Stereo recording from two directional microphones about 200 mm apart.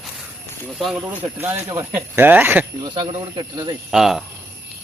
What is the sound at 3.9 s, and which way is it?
Speech, centre (ahead or behind).